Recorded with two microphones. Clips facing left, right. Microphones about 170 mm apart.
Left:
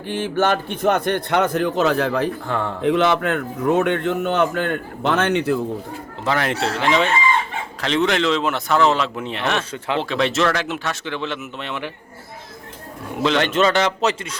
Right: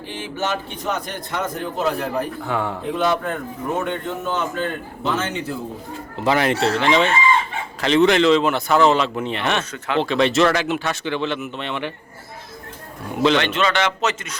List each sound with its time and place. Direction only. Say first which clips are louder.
0.1 s a man's voice: left 6 dB; 55° left (ahead or behind); by 2.3 s 90° left
2.5 s speech: even; 5° right (ahead or behind)
2.8 s a man's voice: left 6 dB; 80° left
6.4 s speech: right 2 dB; centre (ahead or behind)
9.7 s speech: even; 25° left (ahead or behind)
10.0 s speech: right 4 dB; centre (ahead or behind)
13.4 s a man's voice: left 3 dB; 45° left (ahead or behind)